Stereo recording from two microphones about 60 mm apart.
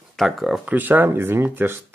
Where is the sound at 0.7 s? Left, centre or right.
Right.